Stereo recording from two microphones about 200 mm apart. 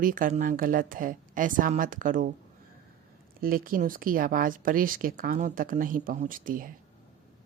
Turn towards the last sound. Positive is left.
turn(degrees=-45)  # may be behind; listen again after turning